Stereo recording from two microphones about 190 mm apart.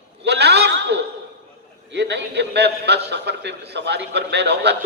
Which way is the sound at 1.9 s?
65° right (ahead or behind).